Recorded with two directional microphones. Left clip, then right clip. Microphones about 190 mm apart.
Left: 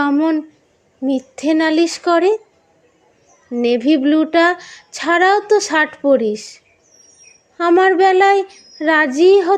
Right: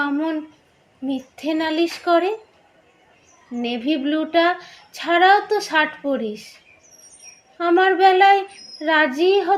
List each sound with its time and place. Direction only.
0.0 s a sound: 65° left (ahead or behind)
1.0 s speech: 65° left (ahead or behind)
3.5 s speech: 65° left (ahead or behind)
7.6 s speech: 65° left (ahead or behind)